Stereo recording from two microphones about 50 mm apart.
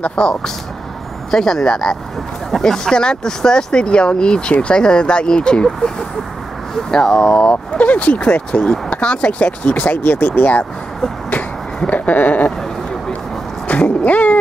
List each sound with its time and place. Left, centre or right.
0.0 s speech: centre
6.9 s speech: centre
7.3 s speech: left
9.8 s goat: left
10.1 s speech: left
11.9 s goat: left
13.7 s vehicle: left